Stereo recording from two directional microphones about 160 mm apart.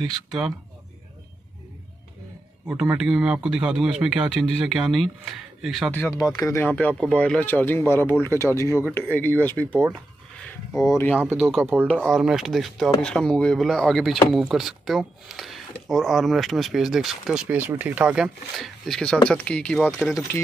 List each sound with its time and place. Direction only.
0.3 s speech: centre (ahead or behind)
2.6 s speech: 5° right (ahead or behind)
5.9 s a man's voice: 20° left (ahead or behind)
10.8 s speech: 20° left (ahead or behind)
11.3 s speech: centre (ahead or behind)